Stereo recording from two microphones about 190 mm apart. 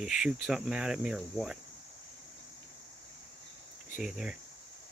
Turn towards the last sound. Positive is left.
turn(degrees=-5)  # may be behind; listen again after turning